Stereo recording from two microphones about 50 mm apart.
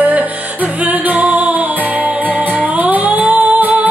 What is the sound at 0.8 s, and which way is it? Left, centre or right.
Music, right.